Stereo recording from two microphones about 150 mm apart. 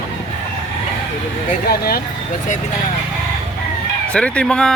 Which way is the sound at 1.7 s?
90° left.